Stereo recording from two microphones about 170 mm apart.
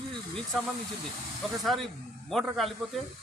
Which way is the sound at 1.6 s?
Centre (ahead or behind).